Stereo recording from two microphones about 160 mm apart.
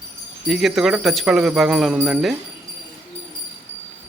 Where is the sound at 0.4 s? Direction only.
Centre (ahead or behind).